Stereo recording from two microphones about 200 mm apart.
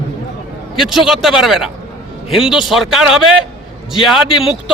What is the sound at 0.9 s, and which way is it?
A man's voice, centre (ahead or behind).